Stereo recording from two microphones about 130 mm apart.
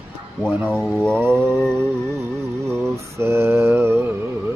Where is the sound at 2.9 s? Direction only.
20° right (ahead or behind).